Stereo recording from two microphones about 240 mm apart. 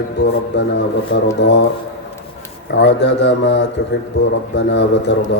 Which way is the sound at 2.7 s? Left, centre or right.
Left.